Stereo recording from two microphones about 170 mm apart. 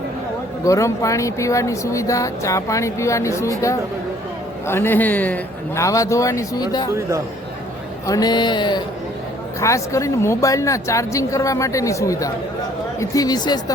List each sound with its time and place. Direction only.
0.6 s speech: 20° left (ahead or behind)
8.0 s speech: 20° left (ahead or behind)